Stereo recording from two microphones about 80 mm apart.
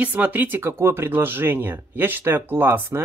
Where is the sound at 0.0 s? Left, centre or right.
Centre.